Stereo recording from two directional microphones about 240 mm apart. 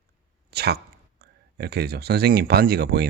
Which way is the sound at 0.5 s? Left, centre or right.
Right.